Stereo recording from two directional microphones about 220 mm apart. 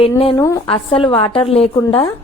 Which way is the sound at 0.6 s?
25° left (ahead or behind).